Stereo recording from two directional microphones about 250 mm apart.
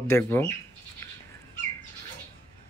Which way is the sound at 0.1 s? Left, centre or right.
Centre.